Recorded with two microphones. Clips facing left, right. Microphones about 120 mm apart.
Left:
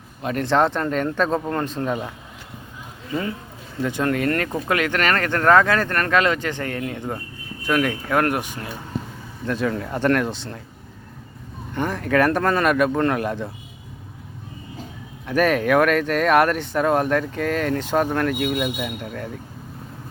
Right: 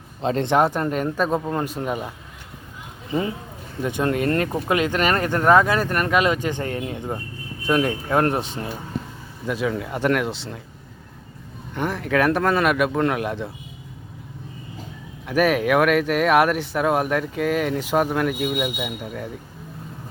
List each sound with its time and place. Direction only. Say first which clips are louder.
0.2 s speech: right 3 dB; 25° right (ahead or behind)
0.5 s speech: left 1 dB; 10° right (ahead or behind)
3.1 s speech: right 2 dB; 20° right (ahead or behind)
9.5 s speech: left 1 dB; 5° right (ahead or behind)
11.7 s speech: left 1 dB; centre (ahead or behind)
15.3 s speech: even; 5° right (ahead or behind)